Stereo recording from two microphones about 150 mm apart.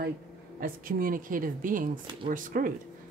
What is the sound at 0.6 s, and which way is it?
A woman's voice, 70° right (ahead or behind).